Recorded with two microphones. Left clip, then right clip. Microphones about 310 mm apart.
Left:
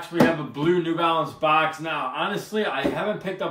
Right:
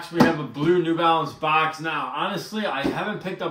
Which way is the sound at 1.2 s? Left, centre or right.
Right.